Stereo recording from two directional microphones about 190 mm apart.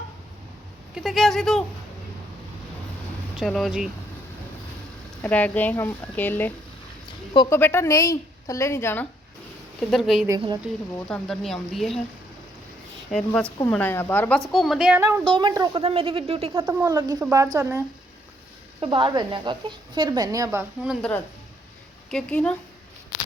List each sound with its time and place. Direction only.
0.9 s a woman's voice: centre (ahead or behind)
3.3 s a woman's voice: centre (ahead or behind)
5.2 s a woman's voice: 10° left (ahead or behind)
9.9 s a woman's voice: centre (ahead or behind)
13.1 s a woman's voice: 5° left (ahead or behind)
14.5 s a woman's voice: centre (ahead or behind)
15.3 s a woman's voice: 25° right (ahead or behind)
16.6 s a woman's voice: 10° right (ahead or behind)
22.1 s a woman's voice: 5° left (ahead or behind)